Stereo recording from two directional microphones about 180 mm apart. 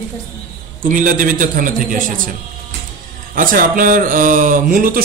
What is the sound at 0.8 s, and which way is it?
Speech, 50° right (ahead or behind).